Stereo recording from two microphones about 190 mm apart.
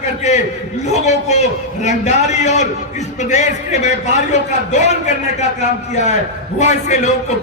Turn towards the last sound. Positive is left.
turn(degrees=40)  # may be behind; listen again after turning